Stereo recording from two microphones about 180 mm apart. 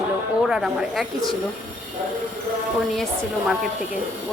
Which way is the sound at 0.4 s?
Centre (ahead or behind).